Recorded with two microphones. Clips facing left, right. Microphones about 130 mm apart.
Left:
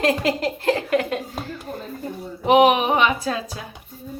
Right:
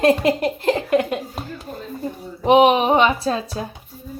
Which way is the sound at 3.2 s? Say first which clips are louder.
Right 4 dB; 30° right (ahead or behind).